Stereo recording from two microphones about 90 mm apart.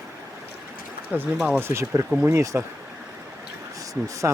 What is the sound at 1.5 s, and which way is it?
Speech, 30° right (ahead or behind).